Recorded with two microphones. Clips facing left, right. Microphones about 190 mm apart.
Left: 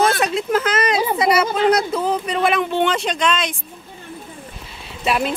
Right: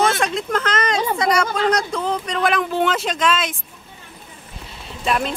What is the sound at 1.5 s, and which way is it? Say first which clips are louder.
Speech: left 3 dB; 20° left (ahead or behind).